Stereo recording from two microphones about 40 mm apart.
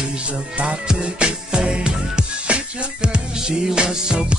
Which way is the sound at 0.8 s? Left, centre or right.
Right.